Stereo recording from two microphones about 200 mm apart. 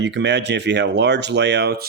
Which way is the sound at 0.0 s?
60° right (ahead or behind).